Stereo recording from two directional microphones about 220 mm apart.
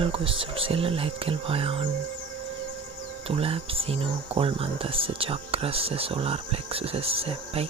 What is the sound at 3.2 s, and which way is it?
Speech, 25° right (ahead or behind).